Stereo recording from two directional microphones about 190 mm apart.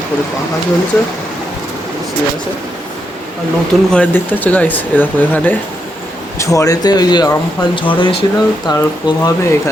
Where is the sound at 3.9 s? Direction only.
10° left (ahead or behind).